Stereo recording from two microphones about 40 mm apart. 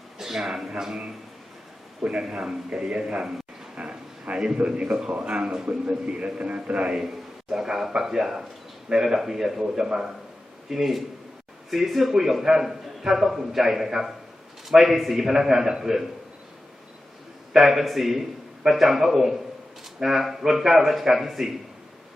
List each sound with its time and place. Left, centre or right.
0.2 s a man's voice: centre
2.2 s a man's voice: centre
3.8 s a sound: right
4.5 s a man's voice: right
5.6 s a man's voice: right
7.5 s a man's voice: centre
17.5 s a man's voice: centre